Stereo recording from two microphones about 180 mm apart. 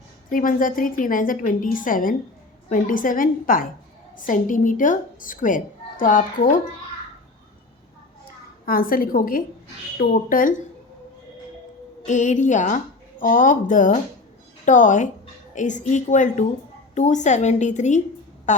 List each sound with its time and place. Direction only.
0.3 s a woman's voice: 50° left (ahead or behind)
8.6 s a woman's voice: 55° left (ahead or behind)
12.0 s a woman's voice: 45° left (ahead or behind)